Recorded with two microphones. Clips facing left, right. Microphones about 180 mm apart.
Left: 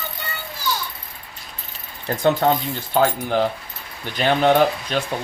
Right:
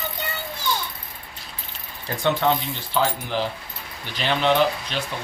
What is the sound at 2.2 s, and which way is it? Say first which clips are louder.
Speech: left 3 dB; 40° left (ahead or behind).